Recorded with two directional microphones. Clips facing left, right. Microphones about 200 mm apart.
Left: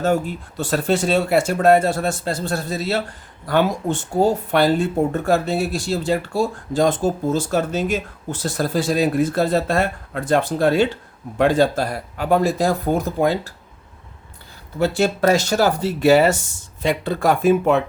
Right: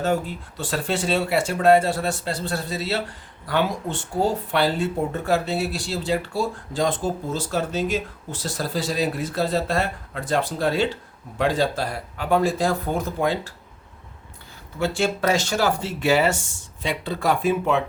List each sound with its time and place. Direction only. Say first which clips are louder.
0.0 s speech: left 4 dB; 45° left (ahead or behind)
14.8 s speech: left 5 dB; 40° left (ahead or behind)